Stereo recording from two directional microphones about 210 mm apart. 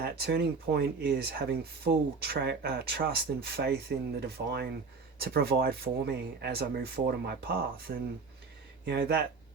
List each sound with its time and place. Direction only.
0.0 s speech: 50° right (ahead or behind)